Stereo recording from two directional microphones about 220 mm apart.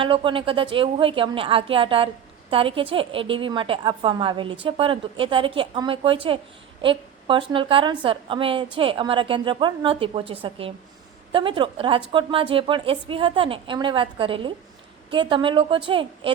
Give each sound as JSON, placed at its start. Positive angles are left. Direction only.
{"t": 0.0, "sound": "a woman's voice", "side_deg": -25}